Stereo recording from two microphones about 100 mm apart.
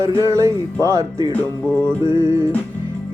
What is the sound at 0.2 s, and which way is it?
Music, 30° right (ahead or behind).